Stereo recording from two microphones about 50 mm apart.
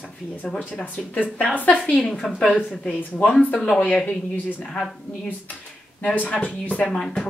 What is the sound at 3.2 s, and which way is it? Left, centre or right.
Speech, left.